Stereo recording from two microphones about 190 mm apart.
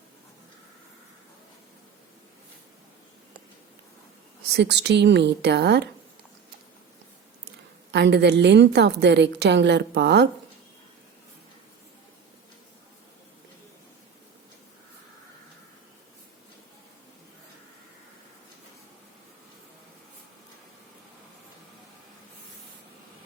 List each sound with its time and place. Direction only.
4.5 s a woman's voice: 65° right (ahead or behind)
7.9 s a woman's voice: 65° right (ahead or behind)